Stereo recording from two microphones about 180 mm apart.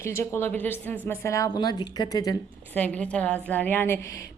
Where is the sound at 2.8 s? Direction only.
10° left (ahead or behind).